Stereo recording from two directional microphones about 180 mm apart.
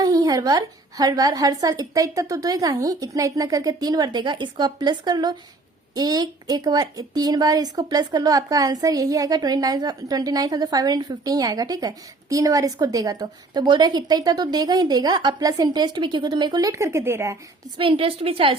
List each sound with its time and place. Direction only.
0.0 s a woman's voice: 20° right (ahead or behind)
17.7 s a woman's voice: 30° right (ahead or behind)